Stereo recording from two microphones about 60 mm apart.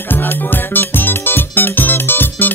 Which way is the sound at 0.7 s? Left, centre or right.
Left.